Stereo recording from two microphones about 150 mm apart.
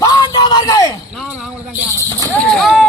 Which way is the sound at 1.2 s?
5° right (ahead or behind).